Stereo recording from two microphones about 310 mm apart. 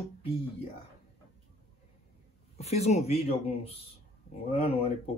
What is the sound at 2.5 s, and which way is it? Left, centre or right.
A man's voice, left.